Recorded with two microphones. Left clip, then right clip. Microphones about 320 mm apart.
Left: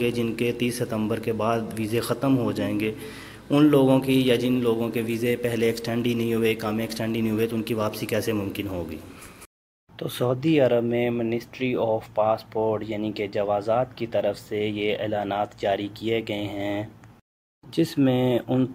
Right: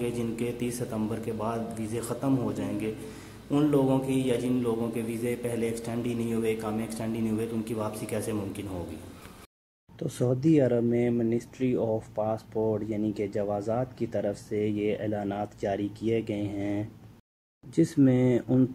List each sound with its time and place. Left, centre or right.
0.0 s a man's voice: centre
10.1 s speech: left
10.4 s speech: left
16.1 s speech: left
17.9 s speech: left